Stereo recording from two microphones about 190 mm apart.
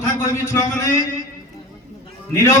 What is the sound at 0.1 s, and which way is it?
Speech, 15° left (ahead or behind).